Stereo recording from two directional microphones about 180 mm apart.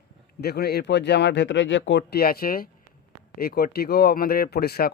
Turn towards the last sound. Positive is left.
turn(degrees=60)  # may be behind; listen again after turning